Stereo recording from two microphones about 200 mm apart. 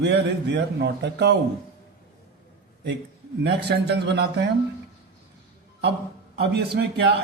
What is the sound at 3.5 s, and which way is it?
A man's voice, 55° right (ahead or behind).